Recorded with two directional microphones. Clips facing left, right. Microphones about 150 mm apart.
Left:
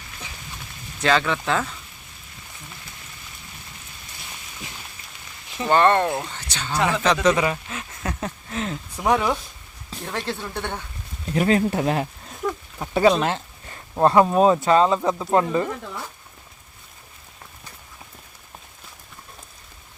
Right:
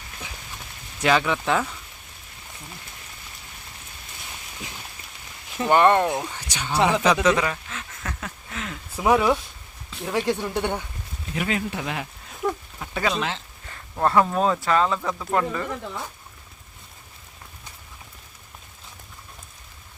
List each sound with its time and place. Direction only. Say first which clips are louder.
0.9 s speech: even; 10° right (ahead or behind)
5.5 s speech: even; 10° right (ahead or behind)
7.0 s speech: even; 5° right (ahead or behind)
7.4 s speech: left 4 dB; 10° left (ahead or behind)
8.0 s speech: left 8 dB; 30° left (ahead or behind)
9.0 s speech: right 2 dB; 5° right (ahead or behind)
11.3 s speech: left 7 dB; 40° left (ahead or behind)
12.4 s a sound: right 1 dB; centre (ahead or behind)
12.8 s speech: left 8 dB; 30° left (ahead or behind)
13.7 s speech: left 5 dB; 20° left (ahead or behind)